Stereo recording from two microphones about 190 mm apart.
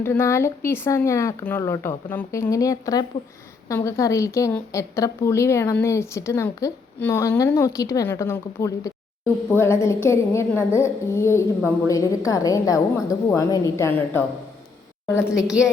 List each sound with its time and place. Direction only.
0.0 s a woman's voice: 15° left (ahead or behind)
15.4 s a woman's voice: 5° right (ahead or behind)